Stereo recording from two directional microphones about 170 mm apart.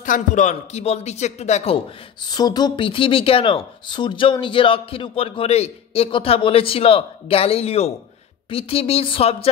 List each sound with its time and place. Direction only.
0.0 s speech: 50° left (ahead or behind)
2.2 s speech: 25° left (ahead or behind)